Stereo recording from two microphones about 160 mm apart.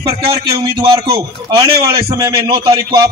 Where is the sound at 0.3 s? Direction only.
25° right (ahead or behind).